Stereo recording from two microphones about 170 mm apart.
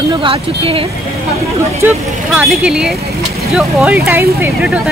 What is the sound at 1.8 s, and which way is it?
Speech, 10° right (ahead or behind).